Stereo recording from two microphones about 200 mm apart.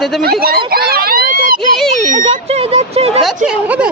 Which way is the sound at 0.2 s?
50° right (ahead or behind).